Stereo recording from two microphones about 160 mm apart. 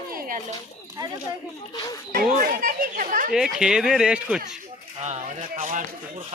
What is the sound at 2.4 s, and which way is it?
Speech, 65° right (ahead or behind).